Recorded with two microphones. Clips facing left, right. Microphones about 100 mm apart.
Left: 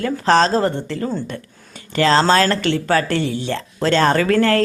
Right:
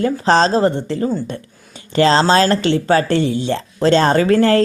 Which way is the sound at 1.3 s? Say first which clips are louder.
Right 2 dB; 25° right (ahead or behind).